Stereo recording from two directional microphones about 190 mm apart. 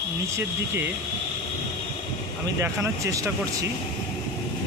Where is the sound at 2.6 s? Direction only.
15° right (ahead or behind).